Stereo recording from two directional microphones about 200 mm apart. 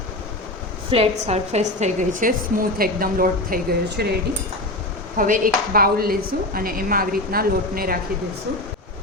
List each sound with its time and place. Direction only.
0.9 s a woman's voice: 30° right (ahead or behind); by 4.0 s 50° right (ahead or behind)
5.1 s a woman's voice: 45° right (ahead or behind)